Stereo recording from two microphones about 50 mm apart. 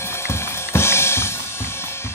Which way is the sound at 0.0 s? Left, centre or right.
Left.